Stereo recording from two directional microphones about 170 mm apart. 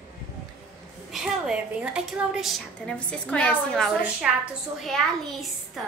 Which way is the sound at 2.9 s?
5° left (ahead or behind).